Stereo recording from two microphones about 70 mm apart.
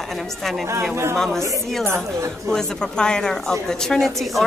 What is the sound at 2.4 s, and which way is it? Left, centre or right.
Speech, centre.